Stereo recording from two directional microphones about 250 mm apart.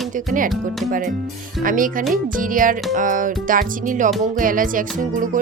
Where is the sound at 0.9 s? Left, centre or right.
Right.